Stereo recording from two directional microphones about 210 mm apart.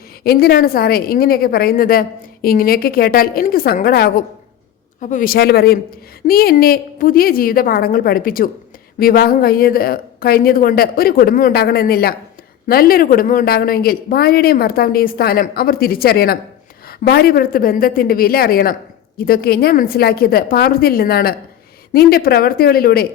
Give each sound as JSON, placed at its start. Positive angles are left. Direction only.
{"t": 0.3, "sound": "a woman's voice", "side_deg": 45}